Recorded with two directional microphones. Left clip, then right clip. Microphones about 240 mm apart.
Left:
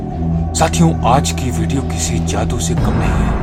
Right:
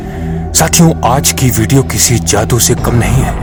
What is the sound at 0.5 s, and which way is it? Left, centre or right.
Speech, right.